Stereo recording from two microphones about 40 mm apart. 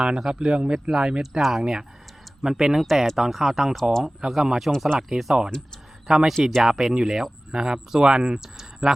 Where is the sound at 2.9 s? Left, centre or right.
Centre.